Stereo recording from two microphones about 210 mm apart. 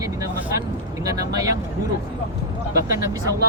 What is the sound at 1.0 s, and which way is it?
Speech, 15° right (ahead or behind).